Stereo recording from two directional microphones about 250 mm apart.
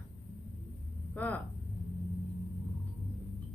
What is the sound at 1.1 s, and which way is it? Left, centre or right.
Speech, centre.